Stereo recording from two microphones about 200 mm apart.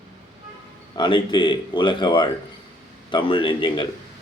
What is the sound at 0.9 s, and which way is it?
A man's voice, 25° left (ahead or behind).